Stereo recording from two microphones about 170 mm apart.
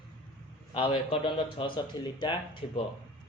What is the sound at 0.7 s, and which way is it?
A man's voice, 30° left (ahead or behind).